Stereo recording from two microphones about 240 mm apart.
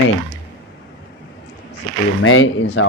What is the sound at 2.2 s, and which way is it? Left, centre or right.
Speech, left.